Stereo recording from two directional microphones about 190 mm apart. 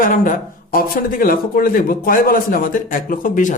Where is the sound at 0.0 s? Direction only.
45° left (ahead or behind).